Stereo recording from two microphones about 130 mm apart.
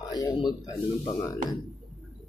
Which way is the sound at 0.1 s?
30° left (ahead or behind).